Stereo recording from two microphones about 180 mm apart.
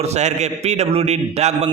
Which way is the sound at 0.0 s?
40° right (ahead or behind).